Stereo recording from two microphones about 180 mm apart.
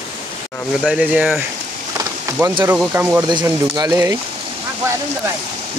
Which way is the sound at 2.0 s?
15° right (ahead or behind).